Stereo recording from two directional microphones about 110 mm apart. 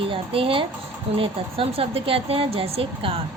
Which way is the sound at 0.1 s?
55° right (ahead or behind).